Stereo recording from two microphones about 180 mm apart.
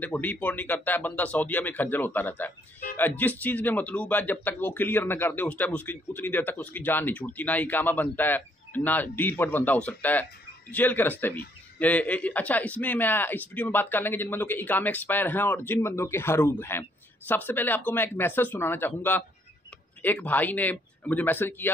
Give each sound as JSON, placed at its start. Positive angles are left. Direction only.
{"t": 0.0, "sound": "a man's voice", "side_deg": 10}